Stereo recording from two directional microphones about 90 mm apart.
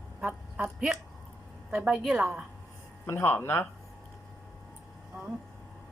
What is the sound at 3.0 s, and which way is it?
Speech, 25° left (ahead or behind).